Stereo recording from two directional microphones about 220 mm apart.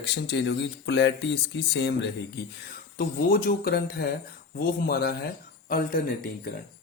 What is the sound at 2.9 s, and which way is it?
Speech, 45° left (ahead or behind).